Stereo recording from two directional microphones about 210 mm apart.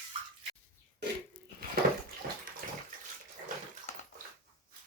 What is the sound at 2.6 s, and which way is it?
Bathtub, 40° right (ahead or behind).